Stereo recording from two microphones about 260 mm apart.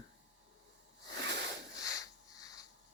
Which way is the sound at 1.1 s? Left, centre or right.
Right.